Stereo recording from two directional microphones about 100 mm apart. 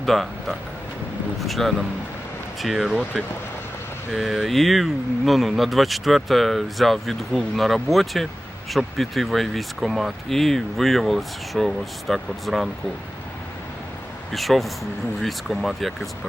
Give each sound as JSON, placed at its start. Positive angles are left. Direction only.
{"t": 0.0, "sound": "speech", "side_deg": 0}
{"t": 14.3, "sound": "speech", "side_deg": 0}